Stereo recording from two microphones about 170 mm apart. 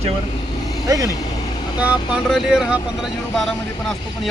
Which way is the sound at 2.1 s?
Centre (ahead or behind).